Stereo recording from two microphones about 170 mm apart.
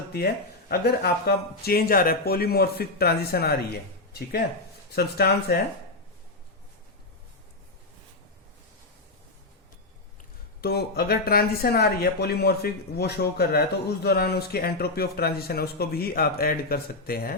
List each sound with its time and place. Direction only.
0.7 s speech: 65° left (ahead or behind)
10.6 s speech: 70° left (ahead or behind)